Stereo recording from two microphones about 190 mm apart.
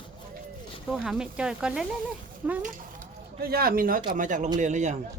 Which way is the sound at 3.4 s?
55° right (ahead or behind).